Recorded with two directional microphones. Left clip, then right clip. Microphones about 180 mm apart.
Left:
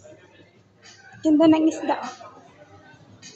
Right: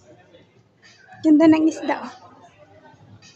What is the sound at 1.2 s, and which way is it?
Speech, 20° right (ahead or behind).